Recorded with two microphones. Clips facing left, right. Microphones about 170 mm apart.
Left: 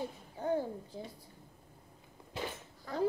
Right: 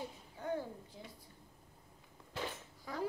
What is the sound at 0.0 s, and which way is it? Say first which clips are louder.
A child's voice: left 6 dB; 30° left (ahead or behind).